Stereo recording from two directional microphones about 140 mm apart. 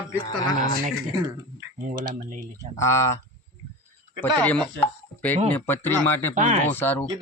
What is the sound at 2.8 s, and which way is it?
A man's voice, 20° left (ahead or behind).